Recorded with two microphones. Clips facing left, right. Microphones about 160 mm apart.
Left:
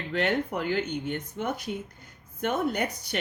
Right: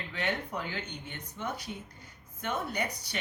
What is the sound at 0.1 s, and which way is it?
Speech, 65° left (ahead or behind).